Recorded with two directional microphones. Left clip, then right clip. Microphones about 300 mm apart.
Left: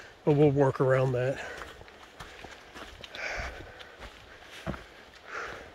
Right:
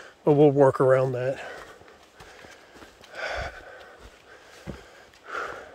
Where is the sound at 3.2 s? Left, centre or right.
Centre.